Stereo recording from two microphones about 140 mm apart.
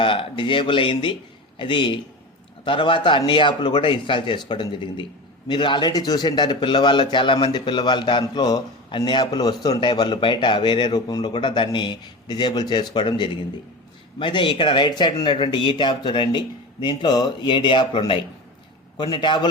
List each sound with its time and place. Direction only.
0.0 s a man's voice: 40° left (ahead or behind)